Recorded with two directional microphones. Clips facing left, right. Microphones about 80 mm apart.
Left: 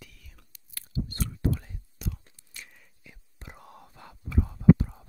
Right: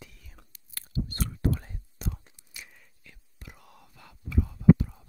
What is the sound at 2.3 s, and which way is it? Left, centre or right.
Whispering, centre.